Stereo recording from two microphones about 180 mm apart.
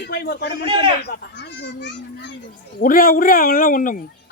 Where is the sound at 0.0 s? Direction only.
60° left (ahead or behind).